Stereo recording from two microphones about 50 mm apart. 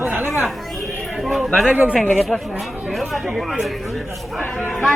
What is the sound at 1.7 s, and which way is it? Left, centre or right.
Speech, right.